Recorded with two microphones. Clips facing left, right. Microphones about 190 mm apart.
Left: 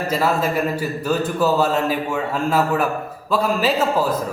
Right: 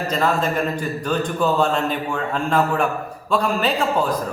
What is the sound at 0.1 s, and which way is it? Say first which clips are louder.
A man's voice: left 1 dB; 10° left (ahead or behind).